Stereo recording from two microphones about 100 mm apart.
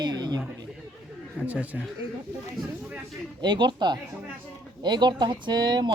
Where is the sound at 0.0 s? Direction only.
45° right (ahead or behind).